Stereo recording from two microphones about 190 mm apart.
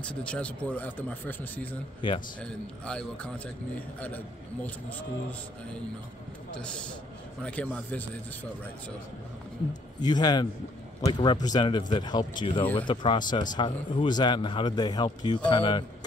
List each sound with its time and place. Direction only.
0.0 s speech: 5° left (ahead or behind)
2.0 s speech: 25° left (ahead or behind)
2.4 s a man's voice: 5° left (ahead or behind)
6.6 s a man's voice: 5° left (ahead or behind)
9.9 s speech: 20° left (ahead or behind)